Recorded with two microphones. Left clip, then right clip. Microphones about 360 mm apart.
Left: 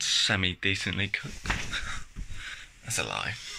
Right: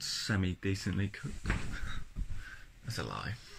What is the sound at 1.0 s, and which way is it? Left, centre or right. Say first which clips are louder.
Speech: left 9 dB; left.